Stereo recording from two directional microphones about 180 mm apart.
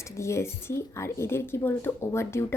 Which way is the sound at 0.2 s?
15° left (ahead or behind).